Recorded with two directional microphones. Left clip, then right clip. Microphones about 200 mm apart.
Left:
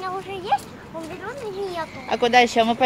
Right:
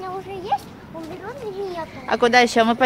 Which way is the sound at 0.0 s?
5° right (ahead or behind).